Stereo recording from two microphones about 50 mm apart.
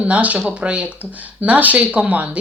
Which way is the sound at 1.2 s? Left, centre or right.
Right.